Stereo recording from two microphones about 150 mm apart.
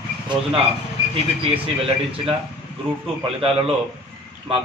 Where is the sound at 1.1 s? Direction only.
40° right (ahead or behind).